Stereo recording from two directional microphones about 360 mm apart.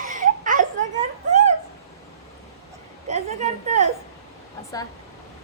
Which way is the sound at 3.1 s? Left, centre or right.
Centre.